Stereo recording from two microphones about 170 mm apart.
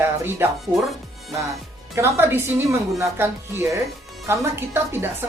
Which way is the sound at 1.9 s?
15° right (ahead or behind).